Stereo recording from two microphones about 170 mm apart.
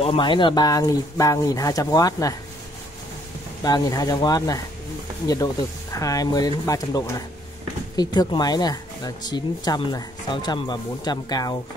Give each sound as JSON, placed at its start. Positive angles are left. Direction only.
{"t": 0.0, "sound": "speech", "side_deg": 30}
{"t": 3.6, "sound": "speech", "side_deg": 20}